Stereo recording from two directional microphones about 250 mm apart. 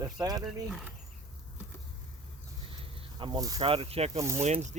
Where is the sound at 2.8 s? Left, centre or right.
Centre.